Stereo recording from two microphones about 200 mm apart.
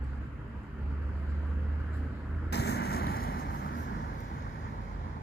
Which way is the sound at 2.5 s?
55° left (ahead or behind).